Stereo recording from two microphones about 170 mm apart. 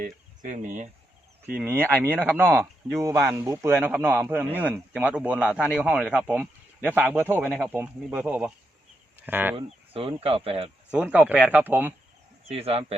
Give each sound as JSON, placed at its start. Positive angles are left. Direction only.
{"t": 0.0, "sound": "speech", "side_deg": -45}
{"t": 1.5, "sound": "speech", "side_deg": -10}
{"t": 9.6, "sound": "speech", "side_deg": -35}
{"t": 10.9, "sound": "speech", "side_deg": -10}
{"t": 12.5, "sound": "speech", "side_deg": -35}